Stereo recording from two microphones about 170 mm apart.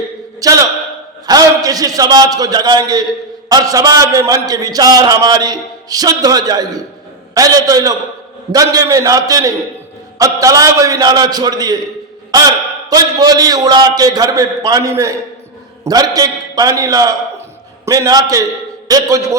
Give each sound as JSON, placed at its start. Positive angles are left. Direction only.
{"t": 0.3, "sound": "a man's voice", "side_deg": -20}